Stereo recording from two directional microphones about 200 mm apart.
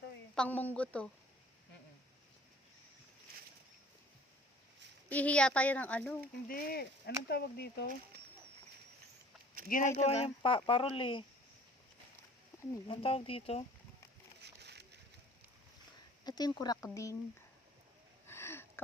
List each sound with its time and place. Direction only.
0.3 s speech: 10° left (ahead or behind)
5.0 s speech: 5° left (ahead or behind)
6.5 s speech: 45° left (ahead or behind)
9.6 s speech: 45° left (ahead or behind); by 11.3 s 25° left (ahead or behind)
12.9 s speech: 25° left (ahead or behind)
14.4 s a sound: 55° right (ahead or behind)
16.2 s speech: 20° left (ahead or behind)
18.3 s sniff: 10° left (ahead or behind)